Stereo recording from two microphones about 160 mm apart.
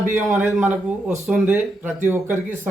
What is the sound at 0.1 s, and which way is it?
Speech, 15° right (ahead or behind).